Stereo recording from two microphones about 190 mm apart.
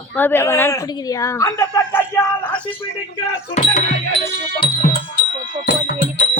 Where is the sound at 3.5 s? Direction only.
35° left (ahead or behind).